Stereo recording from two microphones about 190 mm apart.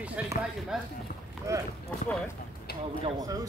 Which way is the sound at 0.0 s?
5° right (ahead or behind).